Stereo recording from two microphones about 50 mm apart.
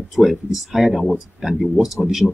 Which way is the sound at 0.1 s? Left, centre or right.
Centre.